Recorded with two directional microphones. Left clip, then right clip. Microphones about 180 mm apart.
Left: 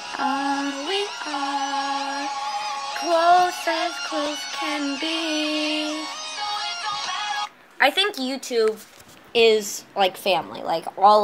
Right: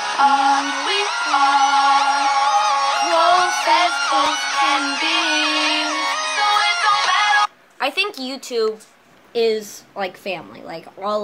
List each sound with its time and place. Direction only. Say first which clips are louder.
0.0 s music: right 10 dB; 40° right (ahead or behind)
7.8 s speech: left 2 dB; centre (ahead or behind)
9.9 s a woman's voice: left 5 dB; 10° right (ahead or behind)